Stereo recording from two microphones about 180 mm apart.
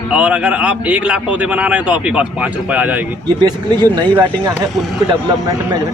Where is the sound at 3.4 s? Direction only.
25° right (ahead or behind).